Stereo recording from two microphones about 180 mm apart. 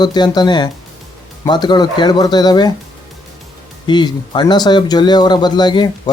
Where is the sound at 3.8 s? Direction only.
25° left (ahead or behind).